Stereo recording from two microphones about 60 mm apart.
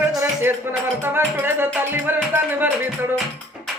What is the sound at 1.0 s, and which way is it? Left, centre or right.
Speech, right.